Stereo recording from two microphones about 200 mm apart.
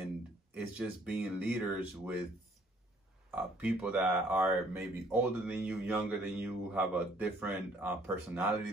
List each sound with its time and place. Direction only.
0.6 s speech: 5° right (ahead or behind)
3.3 s speech: 5° right (ahead or behind)